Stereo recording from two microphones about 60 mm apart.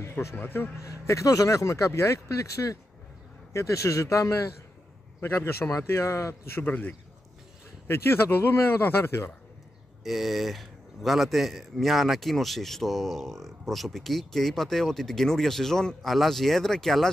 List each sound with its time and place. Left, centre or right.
0.4 s speech: left
0.7 s speech: left
5.2 s a man's voice: left
6.6 s speech: left
7.9 s speech: left
10.0 s speech: centre